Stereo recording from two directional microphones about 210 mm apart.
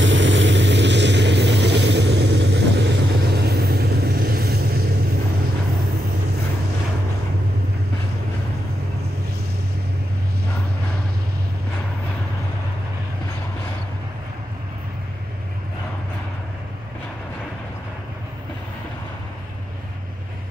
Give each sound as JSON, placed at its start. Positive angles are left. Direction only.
{"t": 0.0, "sound": "vehicle", "side_deg": -60}